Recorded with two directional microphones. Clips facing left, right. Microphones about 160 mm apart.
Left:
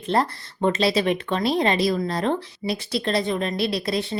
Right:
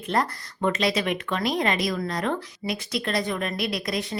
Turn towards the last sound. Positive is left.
turn(degrees=30)  # may be behind; listen again after turning